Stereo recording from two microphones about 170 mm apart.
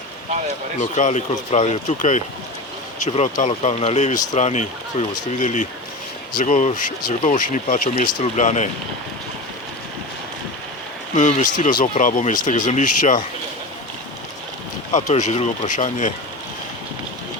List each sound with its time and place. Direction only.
0.8 s speech: 45° left (ahead or behind)
3.4 s speech: 40° left (ahead or behind)
11.1 s speech: 45° left (ahead or behind)
14.9 s speech: 45° left (ahead or behind)